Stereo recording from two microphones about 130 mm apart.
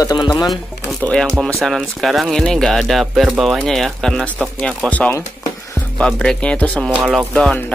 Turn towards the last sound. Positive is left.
turn(degrees=0)  # may be behind; listen again after turning